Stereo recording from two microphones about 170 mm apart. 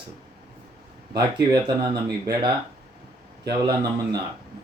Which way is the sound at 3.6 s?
25° right (ahead or behind).